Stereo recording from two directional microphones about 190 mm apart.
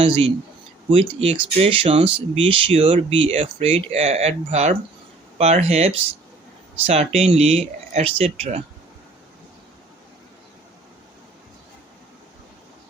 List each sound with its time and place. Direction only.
0.0 s speech: 30° right (ahead or behind)